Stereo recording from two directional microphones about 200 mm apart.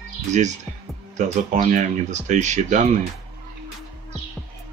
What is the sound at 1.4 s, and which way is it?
Speech, 40° right (ahead or behind).